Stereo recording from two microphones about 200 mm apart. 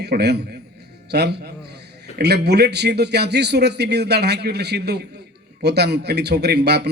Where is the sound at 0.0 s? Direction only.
55° right (ahead or behind).